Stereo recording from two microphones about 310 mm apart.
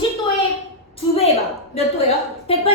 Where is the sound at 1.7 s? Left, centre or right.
Centre.